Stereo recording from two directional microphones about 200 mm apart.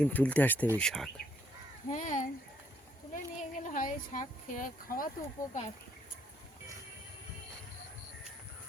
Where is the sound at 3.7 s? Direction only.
40° left (ahead or behind).